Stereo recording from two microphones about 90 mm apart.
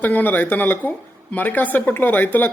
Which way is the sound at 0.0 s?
20° left (ahead or behind).